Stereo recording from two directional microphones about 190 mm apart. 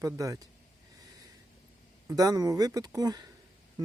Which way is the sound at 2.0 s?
20° right (ahead or behind).